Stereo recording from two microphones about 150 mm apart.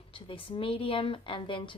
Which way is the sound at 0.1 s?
35° left (ahead or behind).